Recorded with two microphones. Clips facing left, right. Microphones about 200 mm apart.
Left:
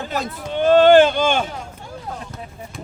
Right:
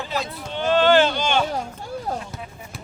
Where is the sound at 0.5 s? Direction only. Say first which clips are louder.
Left 6 dB; 50° left (ahead or behind).